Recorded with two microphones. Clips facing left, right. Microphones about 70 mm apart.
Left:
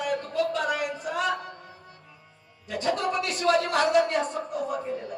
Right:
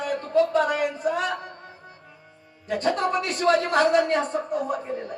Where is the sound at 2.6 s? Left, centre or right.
Right.